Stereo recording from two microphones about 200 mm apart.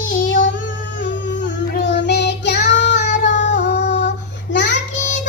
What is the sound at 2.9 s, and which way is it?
Child singing, 40° left (ahead or behind).